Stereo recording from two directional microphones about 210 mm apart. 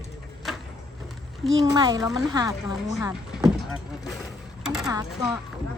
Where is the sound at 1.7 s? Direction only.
20° right (ahead or behind).